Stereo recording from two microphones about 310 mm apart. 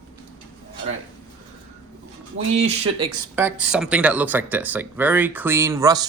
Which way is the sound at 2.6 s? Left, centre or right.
Centre.